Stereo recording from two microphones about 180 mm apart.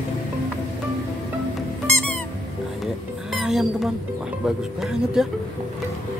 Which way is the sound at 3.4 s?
Centre (ahead or behind).